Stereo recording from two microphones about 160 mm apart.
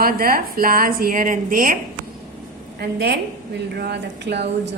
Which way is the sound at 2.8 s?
90° right.